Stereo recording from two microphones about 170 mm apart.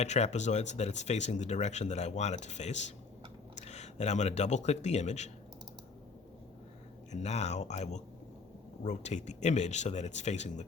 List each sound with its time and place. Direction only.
0.0 s speech: 40° left (ahead or behind)
7.1 s speech: 40° left (ahead or behind)